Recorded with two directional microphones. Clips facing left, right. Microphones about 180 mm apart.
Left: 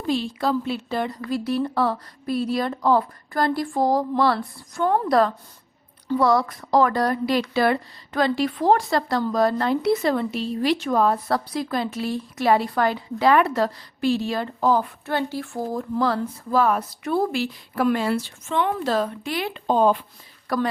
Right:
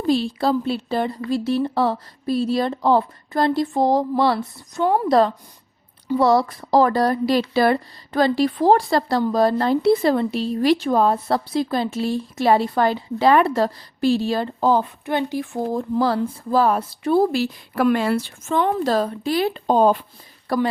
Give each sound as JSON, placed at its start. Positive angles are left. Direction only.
{"t": 0.1, "sound": "speech", "side_deg": -35}
{"t": 4.8, "sound": "speech", "side_deg": -10}
{"t": 5.0, "sound": "speech", "side_deg": -25}
{"t": 15.0, "sound": "speech", "side_deg": -15}
{"t": 17.7, "sound": "speech", "side_deg": -65}
{"t": 18.4, "sound": "speech", "side_deg": -40}